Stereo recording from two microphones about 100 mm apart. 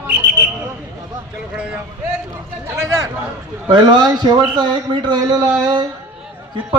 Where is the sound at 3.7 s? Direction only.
45° right (ahead or behind).